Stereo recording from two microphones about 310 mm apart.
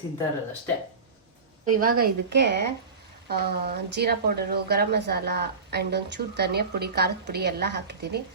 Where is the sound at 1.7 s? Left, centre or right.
Right.